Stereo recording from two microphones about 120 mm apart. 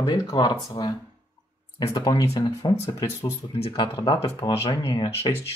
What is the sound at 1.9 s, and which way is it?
Speech, 35° left (ahead or behind).